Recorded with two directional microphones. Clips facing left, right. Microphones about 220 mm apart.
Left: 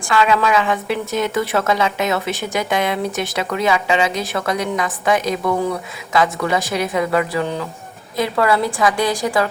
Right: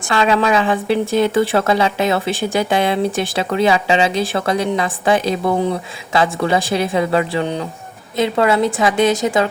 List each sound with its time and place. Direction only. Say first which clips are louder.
0.1 s a woman's voice: right 1 dB; 30° right (ahead or behind)